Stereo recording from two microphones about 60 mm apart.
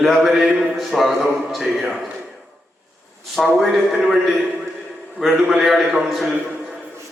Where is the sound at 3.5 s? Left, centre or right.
Centre.